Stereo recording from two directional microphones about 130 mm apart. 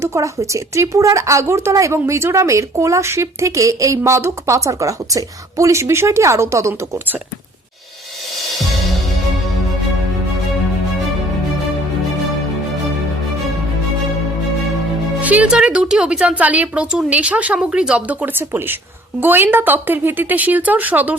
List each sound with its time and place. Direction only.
0.0 s speech: 20° right (ahead or behind)
15.2 s speech: 10° right (ahead or behind)